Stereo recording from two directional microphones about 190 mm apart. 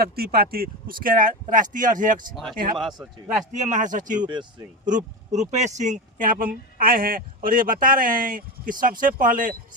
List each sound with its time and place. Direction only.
0.0 s speech: 55° right (ahead or behind)
2.3 s speech: centre (ahead or behind)
3.5 s speech: 40° right (ahead or behind)